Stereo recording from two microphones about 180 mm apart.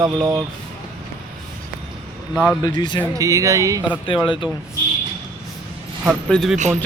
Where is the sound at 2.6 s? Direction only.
25° left (ahead or behind).